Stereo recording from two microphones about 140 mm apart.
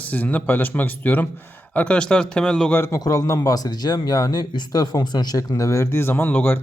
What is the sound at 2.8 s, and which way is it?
Speech, 25° left (ahead or behind).